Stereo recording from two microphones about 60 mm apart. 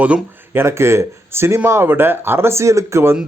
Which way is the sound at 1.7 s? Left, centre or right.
Right.